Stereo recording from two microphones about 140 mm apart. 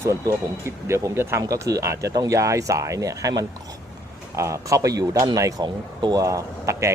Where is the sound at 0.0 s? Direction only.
20° right (ahead or behind).